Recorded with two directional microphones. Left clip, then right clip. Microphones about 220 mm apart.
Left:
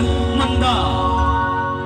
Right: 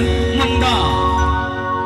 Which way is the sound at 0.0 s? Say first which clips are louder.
Right 2 dB; 20° right (ahead or behind).